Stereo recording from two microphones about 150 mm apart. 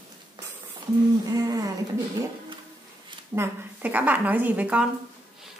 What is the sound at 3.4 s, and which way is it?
A woman's voice, 10° right (ahead or behind).